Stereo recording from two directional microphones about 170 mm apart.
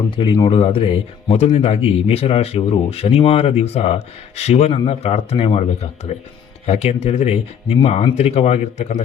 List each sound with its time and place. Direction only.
0.1 s a man's voice: 30° left (ahead or behind)